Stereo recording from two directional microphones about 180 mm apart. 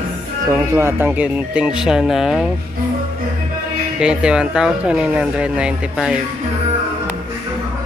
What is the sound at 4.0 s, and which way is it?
Speech, 5° right (ahead or behind).